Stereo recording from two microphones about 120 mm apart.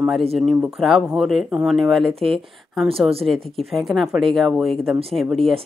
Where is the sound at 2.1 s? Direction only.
50° right (ahead or behind).